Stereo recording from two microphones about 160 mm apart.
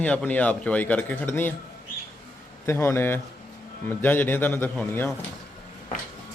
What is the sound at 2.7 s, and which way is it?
Speech, 15° left (ahead or behind).